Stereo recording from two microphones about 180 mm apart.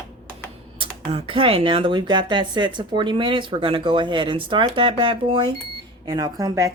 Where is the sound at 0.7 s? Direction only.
30° right (ahead or behind).